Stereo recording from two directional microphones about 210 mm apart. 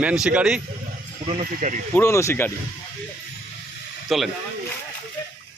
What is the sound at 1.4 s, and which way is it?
Speech, 40° right (ahead or behind).